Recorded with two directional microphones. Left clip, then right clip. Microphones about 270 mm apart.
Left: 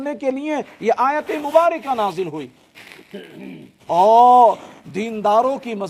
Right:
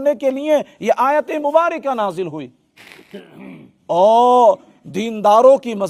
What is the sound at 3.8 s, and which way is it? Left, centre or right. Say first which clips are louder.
A man's voice: left 1 dB; right.